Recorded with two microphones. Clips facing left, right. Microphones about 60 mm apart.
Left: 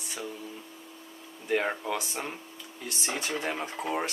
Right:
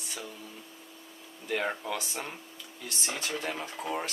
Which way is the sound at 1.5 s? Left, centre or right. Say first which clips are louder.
Left 3 dB; centre.